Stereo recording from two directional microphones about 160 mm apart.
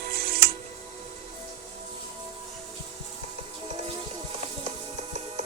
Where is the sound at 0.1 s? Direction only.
85° right.